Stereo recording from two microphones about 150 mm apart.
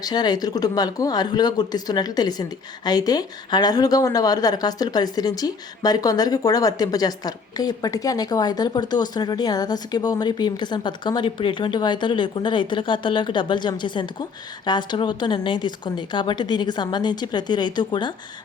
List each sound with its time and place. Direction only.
0.0 s speech: 25° left (ahead or behind)